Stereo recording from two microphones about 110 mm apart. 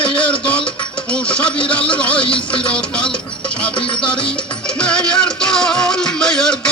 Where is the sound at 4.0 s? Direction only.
10° left (ahead or behind).